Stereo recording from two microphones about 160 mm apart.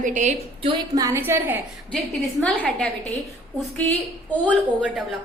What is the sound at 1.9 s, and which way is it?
Speech, 5° left (ahead or behind).